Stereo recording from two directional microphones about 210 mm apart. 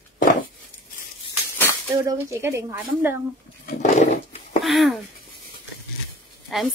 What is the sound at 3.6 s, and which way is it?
Roaring cats, 35° left (ahead or behind).